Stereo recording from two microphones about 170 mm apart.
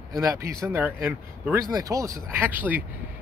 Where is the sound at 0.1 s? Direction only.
20° right (ahead or behind).